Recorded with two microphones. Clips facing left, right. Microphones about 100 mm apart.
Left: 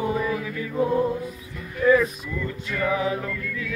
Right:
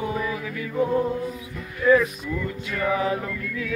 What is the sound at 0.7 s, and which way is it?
Music, 10° left (ahead or behind).